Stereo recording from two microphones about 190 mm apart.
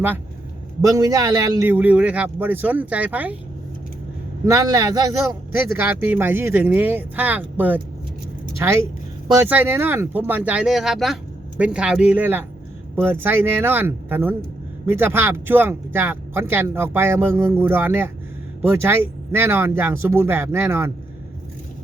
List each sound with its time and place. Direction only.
0.9 s speech: 20° right (ahead or behind)
4.4 s a man's voice: 20° right (ahead or behind)